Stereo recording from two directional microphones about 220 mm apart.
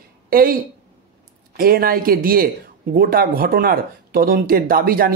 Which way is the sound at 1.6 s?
40° right (ahead or behind).